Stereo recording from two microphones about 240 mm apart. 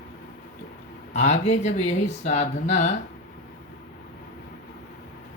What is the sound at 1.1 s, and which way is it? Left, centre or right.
Speech, left.